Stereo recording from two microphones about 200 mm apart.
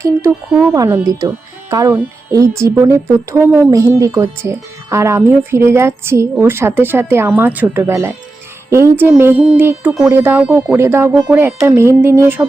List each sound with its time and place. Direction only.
0.0 s speech: 15° right (ahead or behind)